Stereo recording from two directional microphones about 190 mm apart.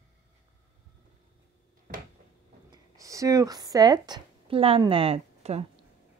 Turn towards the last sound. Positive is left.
turn(degrees=-35)  # may be behind; listen again after turning